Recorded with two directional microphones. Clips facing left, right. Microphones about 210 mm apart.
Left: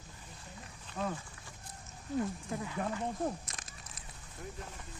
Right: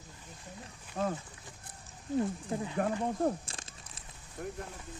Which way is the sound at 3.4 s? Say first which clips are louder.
Right 2 dB; 30° right (ahead or behind).